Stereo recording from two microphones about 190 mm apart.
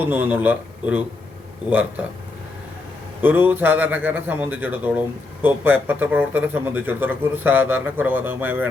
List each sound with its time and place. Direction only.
0.0 s a man's voice: 10° right (ahead or behind)
3.2 s a man's voice: 10° right (ahead or behind)